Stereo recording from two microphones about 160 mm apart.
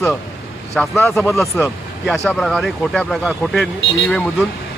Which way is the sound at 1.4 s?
15° left (ahead or behind).